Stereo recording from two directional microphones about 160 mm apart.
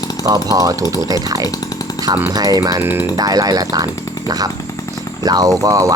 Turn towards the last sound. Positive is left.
turn(degrees=-20)  # may be behind; listen again after turning